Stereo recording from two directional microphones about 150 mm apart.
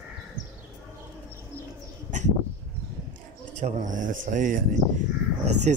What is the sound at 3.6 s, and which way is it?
Speech, 55° right (ahead or behind).